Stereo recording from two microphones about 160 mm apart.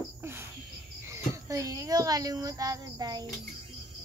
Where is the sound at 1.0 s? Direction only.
20° right (ahead or behind).